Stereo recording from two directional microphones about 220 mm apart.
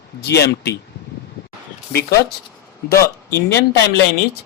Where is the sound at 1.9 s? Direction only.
45° left (ahead or behind).